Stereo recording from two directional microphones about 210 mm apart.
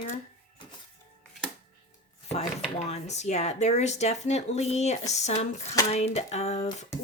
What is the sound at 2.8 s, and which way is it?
Speech, 30° left (ahead or behind).